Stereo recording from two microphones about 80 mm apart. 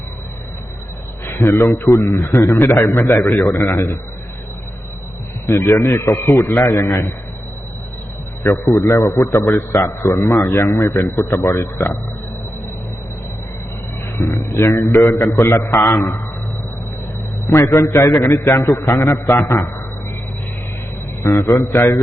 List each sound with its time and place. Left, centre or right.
1.2 s a sound: left
1.9 s a man's voice: left
5.5 s a man's voice: left
8.7 s a man's voice: left
14.2 s a man's voice: left
17.4 s a man's voice: left
21.2 s a man's voice: left
21.6 s a man's voice: left